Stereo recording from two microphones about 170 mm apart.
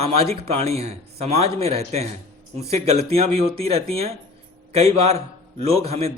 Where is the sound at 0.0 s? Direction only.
35° right (ahead or behind).